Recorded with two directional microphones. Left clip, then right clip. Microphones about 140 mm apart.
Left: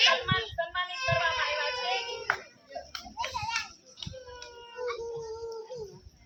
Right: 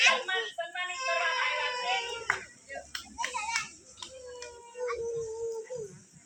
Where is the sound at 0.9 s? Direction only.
5° right (ahead or behind).